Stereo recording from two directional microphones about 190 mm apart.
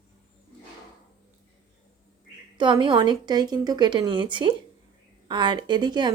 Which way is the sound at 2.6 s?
25° right (ahead or behind).